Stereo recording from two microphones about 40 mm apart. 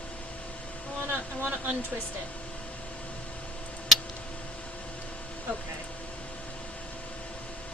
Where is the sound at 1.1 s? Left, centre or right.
Right.